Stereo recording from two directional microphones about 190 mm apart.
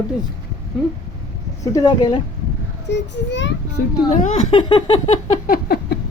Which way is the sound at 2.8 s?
65° left (ahead or behind).